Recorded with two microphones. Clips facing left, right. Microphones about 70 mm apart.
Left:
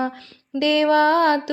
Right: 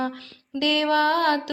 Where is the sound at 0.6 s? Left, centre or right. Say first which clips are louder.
Left 4 dB; left.